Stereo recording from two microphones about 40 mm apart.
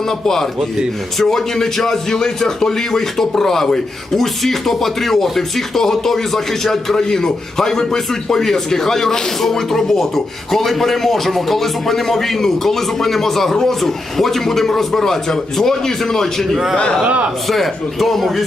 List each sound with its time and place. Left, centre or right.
1.2 s a man's voice: centre
17.0 s a man's voice: right
17.5 s a man's voice: centre